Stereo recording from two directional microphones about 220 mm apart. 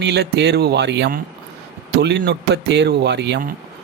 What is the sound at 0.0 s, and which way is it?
Speech, 50° right (ahead or behind).